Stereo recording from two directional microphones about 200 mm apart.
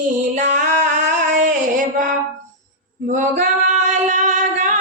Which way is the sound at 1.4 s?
40° right (ahead or behind).